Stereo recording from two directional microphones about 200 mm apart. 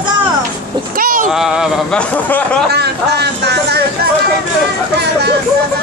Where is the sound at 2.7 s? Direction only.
55° right (ahead or behind).